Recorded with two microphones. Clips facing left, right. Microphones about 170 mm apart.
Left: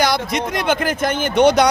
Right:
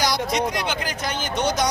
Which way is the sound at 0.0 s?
55° left (ahead or behind).